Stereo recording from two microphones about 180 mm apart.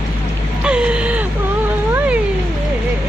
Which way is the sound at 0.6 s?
5° right (ahead or behind).